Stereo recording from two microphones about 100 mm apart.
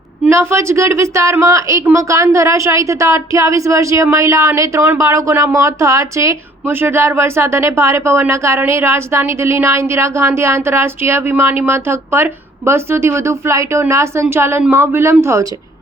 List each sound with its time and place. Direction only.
0.3 s a woman's voice: 25° right (ahead or behind)